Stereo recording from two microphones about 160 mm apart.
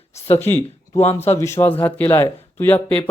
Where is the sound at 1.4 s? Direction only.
15° left (ahead or behind).